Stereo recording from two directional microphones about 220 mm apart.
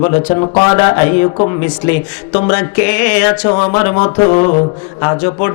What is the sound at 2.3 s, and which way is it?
A man's voice, 25° left (ahead or behind).